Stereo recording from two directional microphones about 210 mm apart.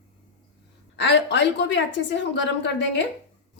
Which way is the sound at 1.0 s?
55° left (ahead or behind).